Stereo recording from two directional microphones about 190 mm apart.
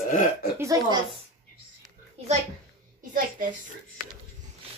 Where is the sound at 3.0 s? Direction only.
45° right (ahead or behind).